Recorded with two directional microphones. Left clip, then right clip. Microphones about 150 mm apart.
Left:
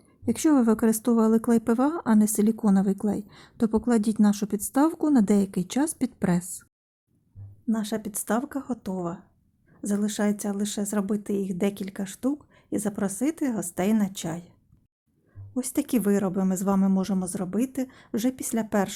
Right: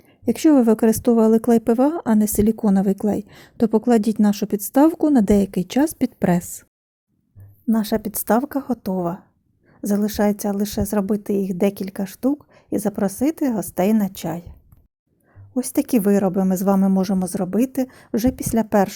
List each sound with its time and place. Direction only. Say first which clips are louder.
0.0 s a woman's voice: right 7 dB; 25° right (ahead or behind)
7.7 s a woman's voice: right 8 dB; 40° right (ahead or behind)
15.5 s speech: right 7 dB; 30° right (ahead or behind)